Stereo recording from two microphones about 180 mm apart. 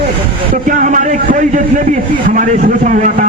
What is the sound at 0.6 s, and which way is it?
A man's voice, 45° right (ahead or behind).